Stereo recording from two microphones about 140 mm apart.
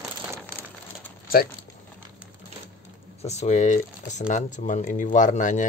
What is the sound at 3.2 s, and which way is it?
Speech, 50° left (ahead or behind).